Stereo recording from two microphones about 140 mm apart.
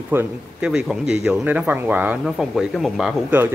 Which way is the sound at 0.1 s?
15° right (ahead or behind).